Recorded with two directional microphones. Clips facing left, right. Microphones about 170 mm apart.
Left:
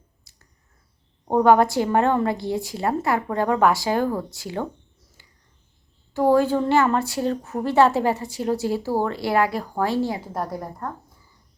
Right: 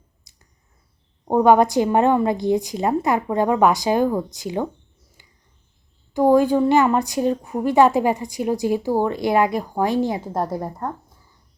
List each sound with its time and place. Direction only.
0.3 s a sound: 15° right (ahead or behind)
1.3 s a woman's voice: 15° right (ahead or behind)
6.1 s a woman's voice: 15° right (ahead or behind)